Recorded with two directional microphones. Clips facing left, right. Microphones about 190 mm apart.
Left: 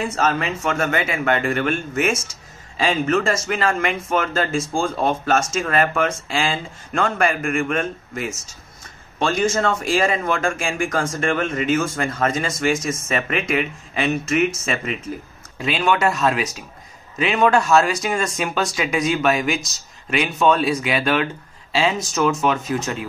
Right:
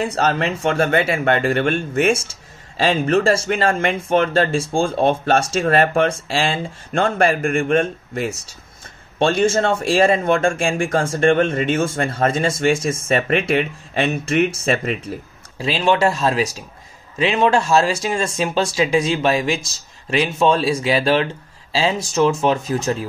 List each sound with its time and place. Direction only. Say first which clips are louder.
0.0 s speech: right 2 dB; 35° right (ahead or behind)